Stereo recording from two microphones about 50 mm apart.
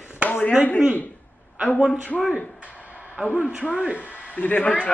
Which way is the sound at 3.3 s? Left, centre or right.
Right.